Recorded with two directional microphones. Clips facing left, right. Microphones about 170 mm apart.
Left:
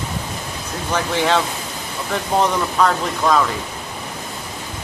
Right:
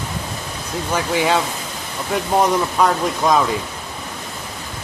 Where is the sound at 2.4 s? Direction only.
10° right (ahead or behind).